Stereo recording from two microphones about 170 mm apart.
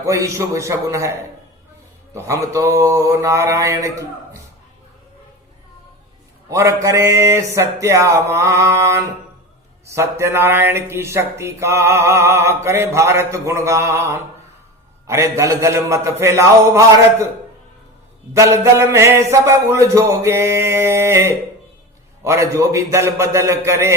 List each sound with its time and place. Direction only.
0.0 s a man's voice: 20° right (ahead or behind)
2.4 s a man's voice: 20° right (ahead or behind)
6.5 s a man's voice: 15° right (ahead or behind)
18.3 s a man's voice: 15° right (ahead or behind)